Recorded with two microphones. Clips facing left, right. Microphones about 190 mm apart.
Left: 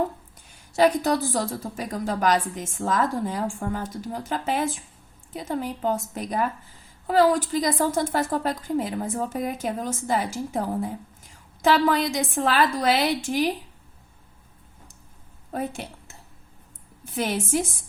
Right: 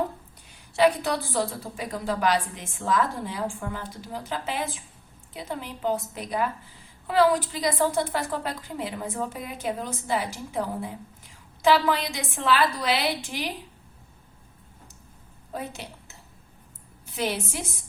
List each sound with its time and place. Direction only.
0.7 s a woman's voice: 45° left (ahead or behind)
15.5 s a woman's voice: 50° left (ahead or behind)